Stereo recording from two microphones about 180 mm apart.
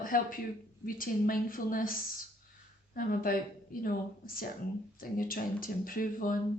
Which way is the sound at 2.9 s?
50° left (ahead or behind).